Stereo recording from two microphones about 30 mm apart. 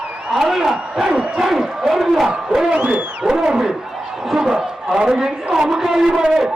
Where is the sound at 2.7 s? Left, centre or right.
Right.